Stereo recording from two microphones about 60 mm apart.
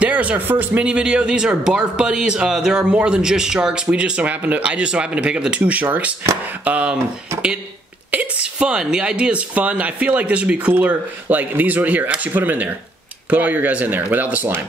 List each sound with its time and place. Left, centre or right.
0.0 s speech: right
2.8 s speech: centre
8.1 s speech: right